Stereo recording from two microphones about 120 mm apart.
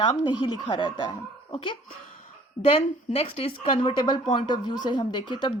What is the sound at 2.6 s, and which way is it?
Speech, 55° left (ahead or behind).